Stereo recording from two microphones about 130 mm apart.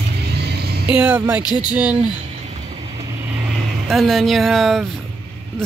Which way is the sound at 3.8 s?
Centre (ahead or behind).